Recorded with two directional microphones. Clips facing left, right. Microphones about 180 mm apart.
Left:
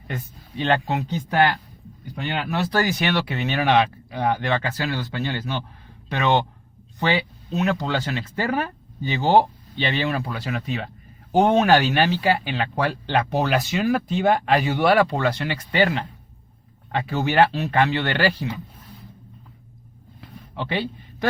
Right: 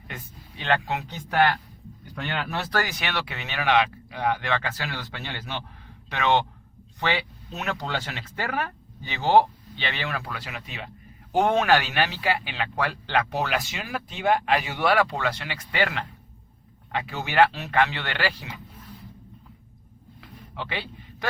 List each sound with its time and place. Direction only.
0.1 s speech: 30° left (ahead or behind)
2.1 s speech: 15° left (ahead or behind)
3.0 s speech: 35° left (ahead or behind)
7.5 s a man's voice: 20° left (ahead or behind)
7.9 s speech: 35° left (ahead or behind)
9.0 s speech: 40° left (ahead or behind)
11.3 s a man's voice: 25° left (ahead or behind)
11.7 s speech: 35° left (ahead or behind)
20.6 s a man's voice: 35° left (ahead or behind)